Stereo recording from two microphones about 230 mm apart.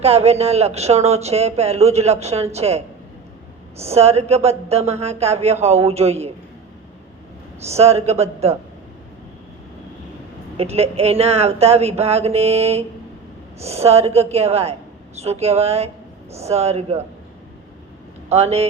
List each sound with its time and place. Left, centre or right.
0.0 s speech: right
7.7 s speech: right
10.6 s speech: right
18.3 s speech: right